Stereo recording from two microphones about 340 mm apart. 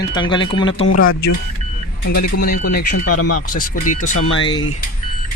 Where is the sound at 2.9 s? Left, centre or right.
Left.